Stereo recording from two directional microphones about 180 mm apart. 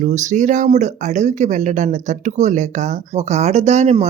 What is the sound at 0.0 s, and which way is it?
Speech, 40° right (ahead or behind).